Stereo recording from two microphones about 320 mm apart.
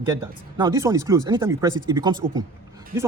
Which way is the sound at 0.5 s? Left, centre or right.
Centre.